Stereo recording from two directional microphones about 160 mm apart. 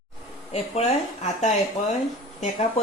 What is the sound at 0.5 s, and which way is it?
A woman's voice, 45° left (ahead or behind).